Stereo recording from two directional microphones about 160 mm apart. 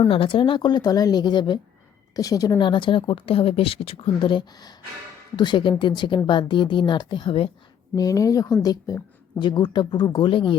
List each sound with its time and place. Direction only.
0.1 s speech: 35° left (ahead or behind)
7.9 s speech: 20° left (ahead or behind)